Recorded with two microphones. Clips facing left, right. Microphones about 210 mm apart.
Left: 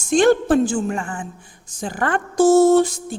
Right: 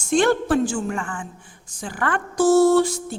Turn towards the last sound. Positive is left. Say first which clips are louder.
# left 2 dB
turn(degrees=20)  # may be behind; listen again after turning